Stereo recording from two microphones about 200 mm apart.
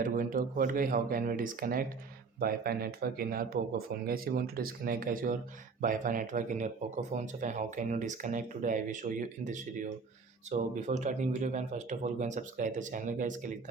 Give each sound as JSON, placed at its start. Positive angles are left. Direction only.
{"t": 0.0, "sound": "speech", "side_deg": -45}